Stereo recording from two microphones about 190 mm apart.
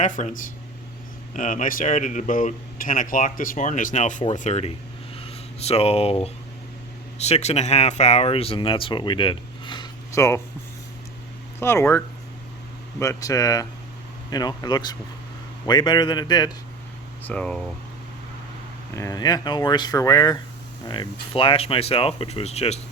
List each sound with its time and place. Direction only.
0.0 s speech: 40° left (ahead or behind); by 10.4 s 15° left (ahead or behind)
11.6 s speech: 15° left (ahead or behind)
17.2 s speech: 5° left (ahead or behind)
18.9 s speech: 20° left (ahead or behind); by 22.8 s 35° left (ahead or behind)